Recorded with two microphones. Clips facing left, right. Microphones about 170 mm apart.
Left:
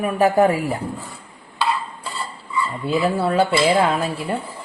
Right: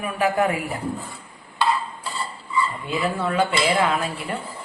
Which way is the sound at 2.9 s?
35° left (ahead or behind).